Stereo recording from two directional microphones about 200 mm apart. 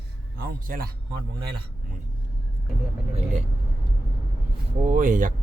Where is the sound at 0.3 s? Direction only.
50° right (ahead or behind).